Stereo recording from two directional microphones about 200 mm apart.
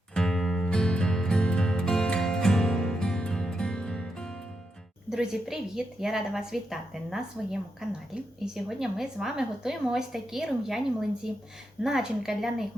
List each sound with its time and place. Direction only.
0.1 s music: 5° left (ahead or behind)
5.0 s speech: centre (ahead or behind)